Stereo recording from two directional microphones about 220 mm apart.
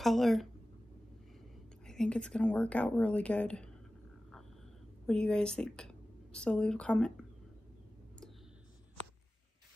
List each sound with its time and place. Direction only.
0.0 s speech: centre (ahead or behind)
1.9 s speech: 5° left (ahead or behind)
5.0 s a woman's voice: 5° left (ahead or behind)